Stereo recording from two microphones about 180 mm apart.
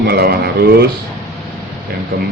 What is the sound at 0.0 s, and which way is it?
Speech, 60° right (ahead or behind).